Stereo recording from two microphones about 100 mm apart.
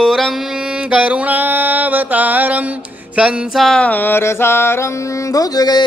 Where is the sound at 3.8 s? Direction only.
20° left (ahead or behind).